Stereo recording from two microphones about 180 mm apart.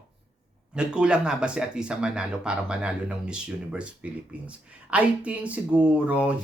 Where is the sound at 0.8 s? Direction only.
5° right (ahead or behind).